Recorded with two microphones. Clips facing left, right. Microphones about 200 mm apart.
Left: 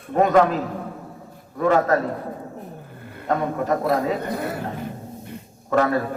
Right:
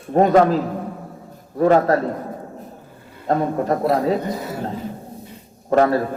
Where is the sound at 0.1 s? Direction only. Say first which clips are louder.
Right 3 dB; 35° right (ahead or behind).